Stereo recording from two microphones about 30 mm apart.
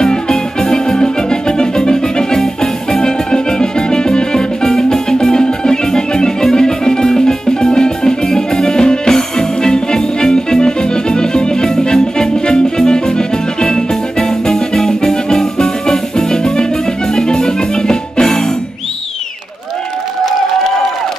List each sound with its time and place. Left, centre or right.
0.0 s music: left
2.3 s music: centre
4.7 s music: centre